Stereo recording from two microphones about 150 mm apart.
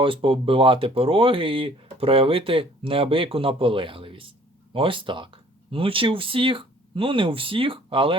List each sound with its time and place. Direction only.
0.0 s speech: 35° right (ahead or behind)